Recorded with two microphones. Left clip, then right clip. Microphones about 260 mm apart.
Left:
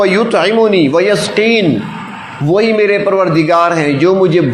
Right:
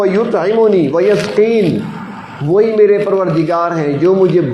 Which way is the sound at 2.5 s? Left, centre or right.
Left.